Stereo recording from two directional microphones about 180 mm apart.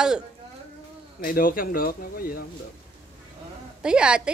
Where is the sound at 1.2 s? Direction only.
50° left (ahead or behind).